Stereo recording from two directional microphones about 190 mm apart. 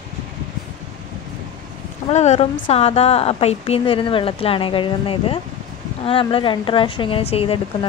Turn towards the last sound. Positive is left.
turn(degrees=30)  # may be behind; listen again after turning